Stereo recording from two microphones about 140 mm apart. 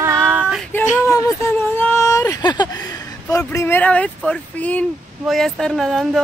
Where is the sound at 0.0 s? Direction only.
20° right (ahead or behind).